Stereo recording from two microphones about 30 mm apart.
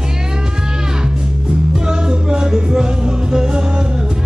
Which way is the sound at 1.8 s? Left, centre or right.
Right.